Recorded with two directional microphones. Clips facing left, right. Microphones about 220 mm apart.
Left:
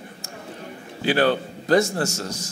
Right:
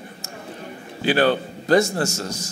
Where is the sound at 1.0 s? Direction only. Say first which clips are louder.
Right 1 dB; 10° right (ahead or behind).